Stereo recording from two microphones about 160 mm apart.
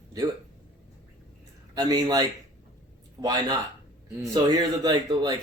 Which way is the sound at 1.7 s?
20° right (ahead or behind).